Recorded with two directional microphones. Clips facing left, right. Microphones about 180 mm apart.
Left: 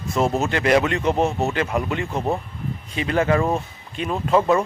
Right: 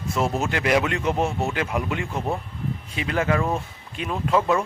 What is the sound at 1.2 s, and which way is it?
Speech, 25° left (ahead or behind).